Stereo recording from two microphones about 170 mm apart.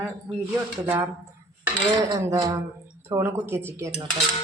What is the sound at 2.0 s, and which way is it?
A woman's voice, 15° right (ahead or behind).